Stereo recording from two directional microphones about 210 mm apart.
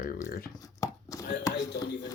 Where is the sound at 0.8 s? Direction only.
15° left (ahead or behind).